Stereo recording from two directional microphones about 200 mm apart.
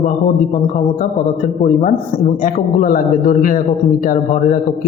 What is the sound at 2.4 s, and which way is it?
A man's voice, 45° left (ahead or behind).